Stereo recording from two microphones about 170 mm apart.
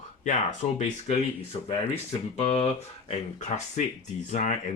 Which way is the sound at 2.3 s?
35° left (ahead or behind).